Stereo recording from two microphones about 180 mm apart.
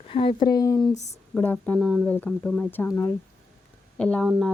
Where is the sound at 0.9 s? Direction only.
40° left (ahead or behind).